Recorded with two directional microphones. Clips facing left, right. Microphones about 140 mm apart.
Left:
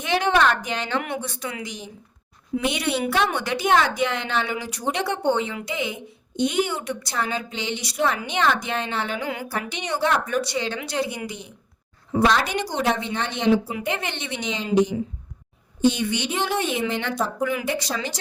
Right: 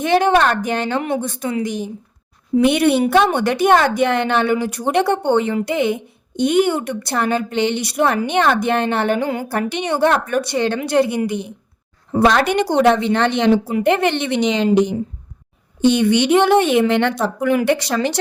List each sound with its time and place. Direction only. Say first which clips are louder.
0.0 s a woman's voice: right 6 dB; 50° right (ahead or behind); by 14.7 s 75° right (ahead or behind)
15.8 s a woman's voice: right 7 dB; 70° right (ahead or behind)